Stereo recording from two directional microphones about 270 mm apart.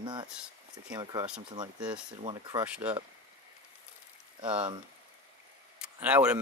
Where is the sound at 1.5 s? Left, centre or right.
Centre.